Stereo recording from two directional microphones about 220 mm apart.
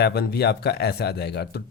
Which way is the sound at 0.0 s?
45° left (ahead or behind).